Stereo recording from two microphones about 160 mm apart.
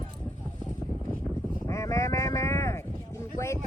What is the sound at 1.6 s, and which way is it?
Speech, 20° left (ahead or behind).